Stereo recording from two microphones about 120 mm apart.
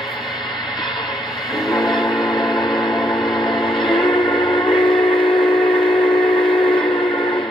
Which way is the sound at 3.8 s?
45° left (ahead or behind).